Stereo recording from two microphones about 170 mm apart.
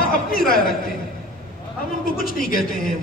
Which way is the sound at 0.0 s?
60° left (ahead or behind).